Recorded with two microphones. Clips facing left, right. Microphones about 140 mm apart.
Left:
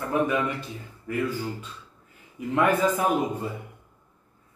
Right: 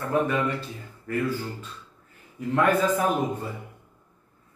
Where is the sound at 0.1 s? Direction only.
15° left (ahead or behind).